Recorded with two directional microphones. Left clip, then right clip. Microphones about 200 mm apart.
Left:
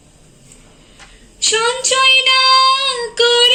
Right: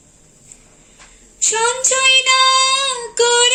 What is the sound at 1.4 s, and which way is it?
Child singing, 55° right (ahead or behind).